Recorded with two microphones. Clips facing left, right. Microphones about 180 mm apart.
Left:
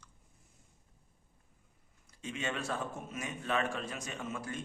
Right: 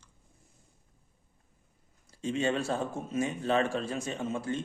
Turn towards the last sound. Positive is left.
turn(degrees=-25)  # may be behind; listen again after turning